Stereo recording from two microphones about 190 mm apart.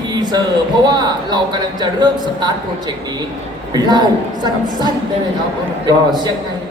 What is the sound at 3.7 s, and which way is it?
Speech, 20° right (ahead or behind).